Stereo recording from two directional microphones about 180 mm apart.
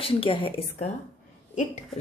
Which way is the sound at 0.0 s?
30° left (ahead or behind).